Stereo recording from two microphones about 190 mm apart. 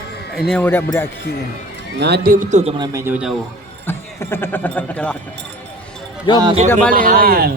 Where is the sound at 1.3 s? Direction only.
55° left (ahead or behind).